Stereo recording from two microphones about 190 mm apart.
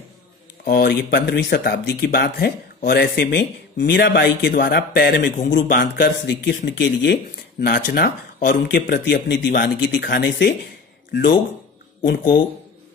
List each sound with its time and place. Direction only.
0.7 s speech: 60° left (ahead or behind)